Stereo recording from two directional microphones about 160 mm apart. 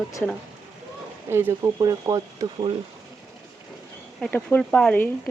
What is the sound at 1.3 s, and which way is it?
Speech, 15° right (ahead or behind).